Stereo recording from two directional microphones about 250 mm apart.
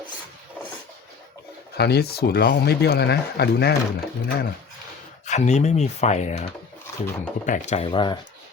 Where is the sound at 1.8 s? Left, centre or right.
Left.